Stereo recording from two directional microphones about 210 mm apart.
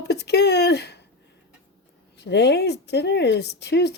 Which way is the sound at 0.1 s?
55° left (ahead or behind).